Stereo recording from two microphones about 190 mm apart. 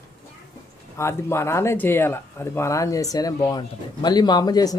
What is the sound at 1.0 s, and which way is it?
Speech, 15° left (ahead or behind).